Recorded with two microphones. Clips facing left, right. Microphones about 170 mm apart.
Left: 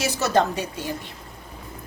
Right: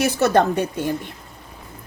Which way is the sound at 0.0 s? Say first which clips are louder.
Right 4 dB; 55° right (ahead or behind).